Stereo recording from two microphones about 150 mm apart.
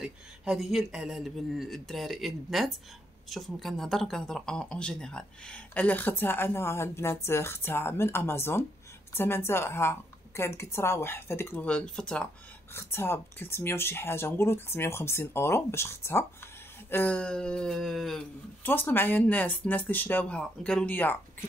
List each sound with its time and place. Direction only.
0.0 s speech: centre (ahead or behind)
18.6 s speech: 15° left (ahead or behind)